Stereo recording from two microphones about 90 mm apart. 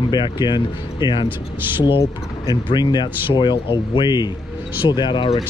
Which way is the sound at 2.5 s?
55° left (ahead or behind).